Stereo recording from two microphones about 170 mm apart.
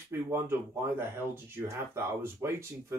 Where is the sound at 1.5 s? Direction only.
15° right (ahead or behind).